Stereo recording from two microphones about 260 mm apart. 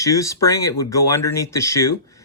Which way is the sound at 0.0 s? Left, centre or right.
Centre.